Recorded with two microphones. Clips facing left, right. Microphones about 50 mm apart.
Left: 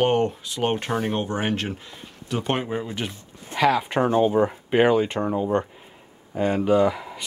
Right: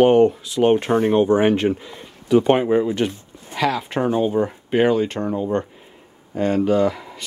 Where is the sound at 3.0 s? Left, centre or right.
Centre.